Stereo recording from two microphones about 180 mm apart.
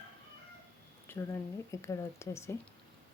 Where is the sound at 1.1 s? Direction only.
15° left (ahead or behind).